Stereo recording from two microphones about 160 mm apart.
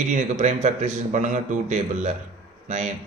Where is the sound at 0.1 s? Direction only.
45° right (ahead or behind).